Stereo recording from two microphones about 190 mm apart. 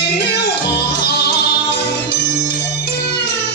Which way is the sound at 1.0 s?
60° left (ahead or behind).